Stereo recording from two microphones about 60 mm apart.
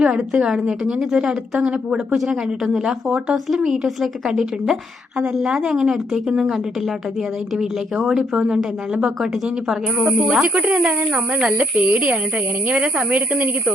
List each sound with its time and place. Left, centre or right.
0.0 s a woman's voice: centre
7.5 s a woman's voice: centre
10.5 s speech: right
12.7 s a woman's voice: centre
13.1 s speech: right